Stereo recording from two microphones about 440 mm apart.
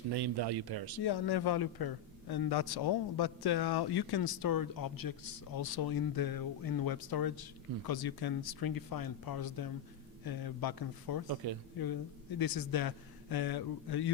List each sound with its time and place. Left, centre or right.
0.1 s speech: right
1.0 s a man's voice: left
11.4 s speech: right
12.4 s a man's voice: left